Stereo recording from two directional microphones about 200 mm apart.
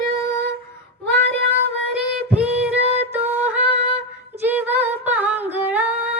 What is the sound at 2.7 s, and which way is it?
Music, 30° right (ahead or behind).